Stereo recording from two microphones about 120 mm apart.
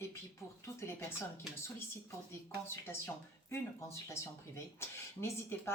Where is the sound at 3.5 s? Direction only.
25° left (ahead or behind).